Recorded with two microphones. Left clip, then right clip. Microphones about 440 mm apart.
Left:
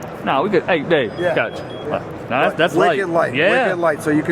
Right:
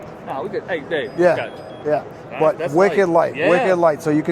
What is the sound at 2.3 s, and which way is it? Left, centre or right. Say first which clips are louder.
Speech: left 2 dB; left.